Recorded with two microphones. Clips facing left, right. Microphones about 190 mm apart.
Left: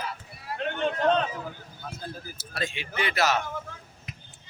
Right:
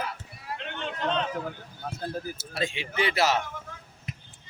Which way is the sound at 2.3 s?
25° right (ahead or behind).